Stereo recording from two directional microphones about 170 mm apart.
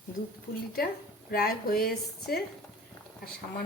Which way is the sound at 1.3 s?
60° left (ahead or behind).